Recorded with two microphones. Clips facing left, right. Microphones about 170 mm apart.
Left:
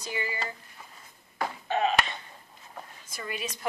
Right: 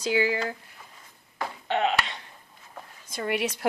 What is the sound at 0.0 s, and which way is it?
Speech, 85° right.